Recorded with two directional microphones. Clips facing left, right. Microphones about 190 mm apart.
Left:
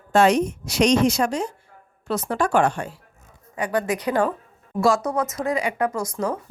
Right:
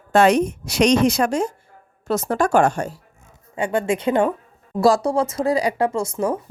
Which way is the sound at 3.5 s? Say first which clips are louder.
Right 3 dB; 25° right (ahead or behind).